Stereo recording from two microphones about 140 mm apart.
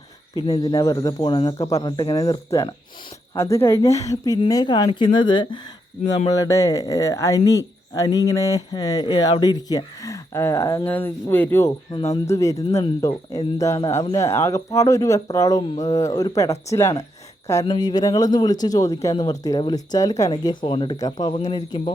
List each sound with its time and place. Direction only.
0.3 s speech: 30° left (ahead or behind)
6.0 s speech: 55° left (ahead or behind)
6.3 s speech: 25° left (ahead or behind)